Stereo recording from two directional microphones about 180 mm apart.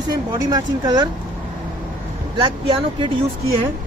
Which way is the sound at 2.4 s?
30° right (ahead or behind).